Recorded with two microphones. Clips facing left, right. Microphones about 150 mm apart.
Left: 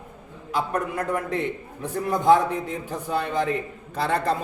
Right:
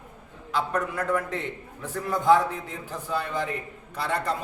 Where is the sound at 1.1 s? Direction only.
15° left (ahead or behind).